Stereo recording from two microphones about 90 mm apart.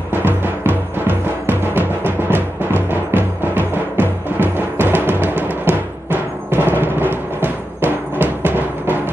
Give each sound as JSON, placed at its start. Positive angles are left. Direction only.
{"t": 0.1, "sound": "music", "side_deg": -20}